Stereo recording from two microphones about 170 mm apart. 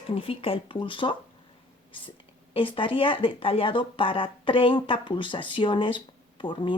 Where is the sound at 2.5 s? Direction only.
30° left (ahead or behind).